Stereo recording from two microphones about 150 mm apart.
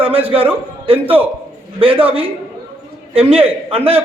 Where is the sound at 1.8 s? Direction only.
35° right (ahead or behind).